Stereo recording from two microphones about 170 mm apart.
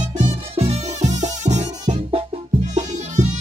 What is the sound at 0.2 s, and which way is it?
Music, 35° right (ahead or behind).